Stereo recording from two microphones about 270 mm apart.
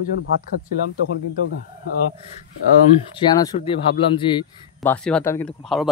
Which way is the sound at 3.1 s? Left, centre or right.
Centre.